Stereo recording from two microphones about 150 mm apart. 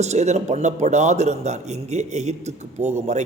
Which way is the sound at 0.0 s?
50° right (ahead or behind).